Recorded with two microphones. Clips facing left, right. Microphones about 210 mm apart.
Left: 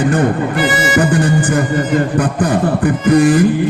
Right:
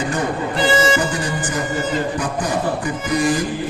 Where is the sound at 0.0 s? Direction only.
55° left (ahead or behind).